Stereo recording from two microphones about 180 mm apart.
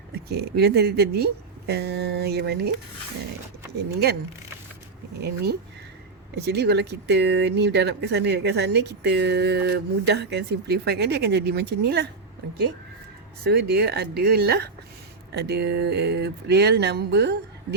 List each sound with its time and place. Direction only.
0.3 s speech: 65° right (ahead or behind)
5.2 s speech: 60° right (ahead or behind)
13.4 s speech: 65° right (ahead or behind)